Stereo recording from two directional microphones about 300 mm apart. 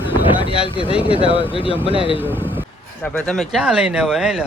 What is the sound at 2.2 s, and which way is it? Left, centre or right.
Speech, centre.